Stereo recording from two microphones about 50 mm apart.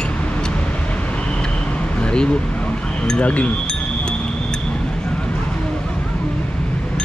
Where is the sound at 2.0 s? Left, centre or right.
Centre.